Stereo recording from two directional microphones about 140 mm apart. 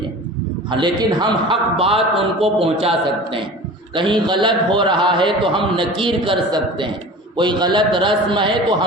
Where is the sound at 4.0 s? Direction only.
35° right (ahead or behind).